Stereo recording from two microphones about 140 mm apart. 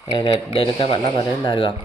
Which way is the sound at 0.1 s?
40° left (ahead or behind).